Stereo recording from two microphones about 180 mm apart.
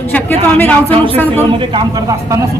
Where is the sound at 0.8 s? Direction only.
30° right (ahead or behind).